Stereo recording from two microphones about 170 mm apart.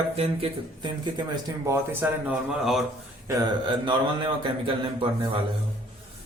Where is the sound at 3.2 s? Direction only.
25° right (ahead or behind).